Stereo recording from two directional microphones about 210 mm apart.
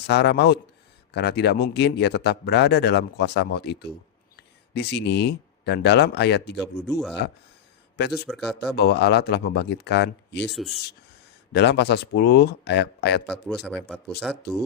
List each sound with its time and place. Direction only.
0.1 s speech: 55° left (ahead or behind)
7.9 s speech: 55° left (ahead or behind)
8.3 s speech: centre (ahead or behind)
8.7 s speech: 50° left (ahead or behind)
11.5 s speech: 55° left (ahead or behind)
13.3 s speech: 5° left (ahead or behind)